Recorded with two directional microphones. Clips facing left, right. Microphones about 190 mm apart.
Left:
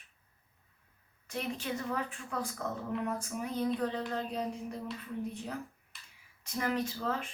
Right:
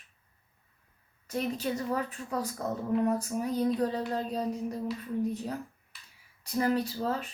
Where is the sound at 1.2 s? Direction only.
40° right (ahead or behind).